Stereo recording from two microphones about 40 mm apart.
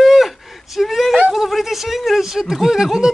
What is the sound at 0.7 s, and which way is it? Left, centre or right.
Whimper, centre.